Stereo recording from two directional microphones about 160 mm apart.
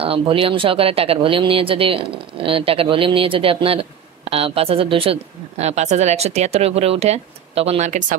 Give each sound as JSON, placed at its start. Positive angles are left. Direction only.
{"t": 0.0, "sound": "speech", "side_deg": -35}